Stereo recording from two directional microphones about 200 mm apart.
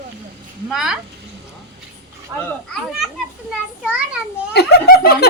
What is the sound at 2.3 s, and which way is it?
Speech, 15° right (ahead or behind).